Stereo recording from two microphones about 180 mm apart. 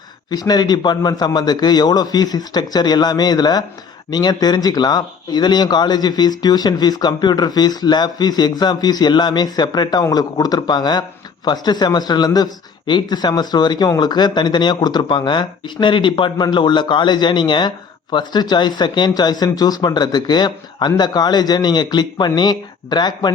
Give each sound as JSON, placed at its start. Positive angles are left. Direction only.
{"t": 0.3, "sound": "speech", "side_deg": 20}